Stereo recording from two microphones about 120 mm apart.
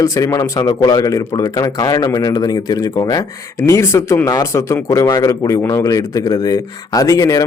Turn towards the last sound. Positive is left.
turn(degrees=30)  # may be behind; listen again after turning